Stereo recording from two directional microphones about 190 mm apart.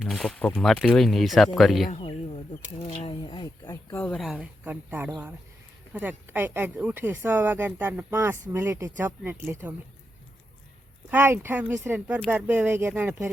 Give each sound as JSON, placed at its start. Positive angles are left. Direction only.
{"t": 0.0, "sound": "speech", "side_deg": 0}
{"t": 1.9, "sound": "a sound", "side_deg": 30}
{"t": 2.8, "sound": "speech", "side_deg": 30}
{"t": 3.9, "sound": "speech", "side_deg": 5}
{"t": 11.1, "sound": "speech", "side_deg": -10}